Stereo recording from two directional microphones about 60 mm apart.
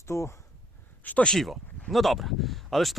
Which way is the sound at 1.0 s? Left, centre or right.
Left.